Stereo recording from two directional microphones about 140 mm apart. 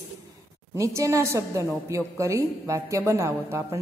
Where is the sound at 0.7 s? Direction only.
20° right (ahead or behind).